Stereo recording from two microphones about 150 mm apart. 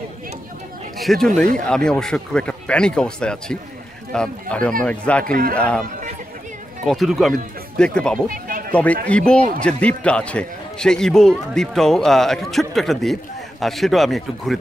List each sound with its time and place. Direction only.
0.9 s a man's voice: centre (ahead or behind)
5.2 s a man's voice: 70° right (ahead or behind)
5.5 s a man's voice: 10° left (ahead or behind)
6.9 s a man's voice: centre (ahead or behind)
8.5 s sheep: 70° right (ahead or behind)
9.0 s a man's voice: 5° left (ahead or behind)